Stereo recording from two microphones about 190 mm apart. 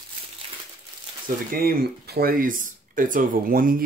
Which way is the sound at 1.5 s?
50° right (ahead or behind).